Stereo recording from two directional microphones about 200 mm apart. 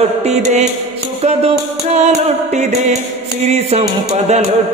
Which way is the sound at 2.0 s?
35° right (ahead or behind).